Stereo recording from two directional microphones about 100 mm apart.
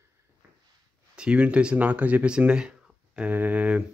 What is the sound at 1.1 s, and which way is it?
Speech, 10° right (ahead or behind).